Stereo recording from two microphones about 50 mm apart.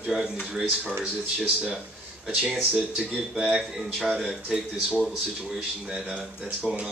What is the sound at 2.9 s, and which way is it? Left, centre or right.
Speech, centre.